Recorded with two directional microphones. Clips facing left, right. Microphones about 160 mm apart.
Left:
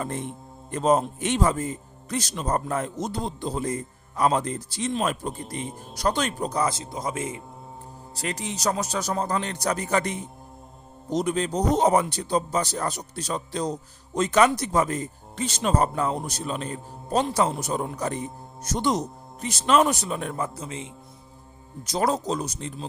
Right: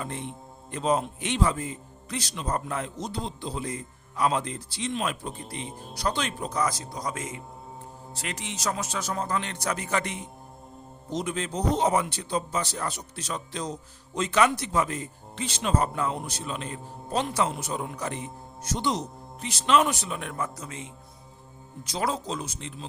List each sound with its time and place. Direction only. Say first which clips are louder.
0.0 s speech: left 4 dB; 45° left (ahead or behind); by 20.9 s 30° left (ahead or behind)
21.8 s speech: left 5 dB; 45° left (ahead or behind)